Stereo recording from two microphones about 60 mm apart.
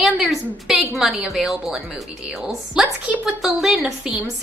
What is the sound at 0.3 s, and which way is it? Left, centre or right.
Speech, centre.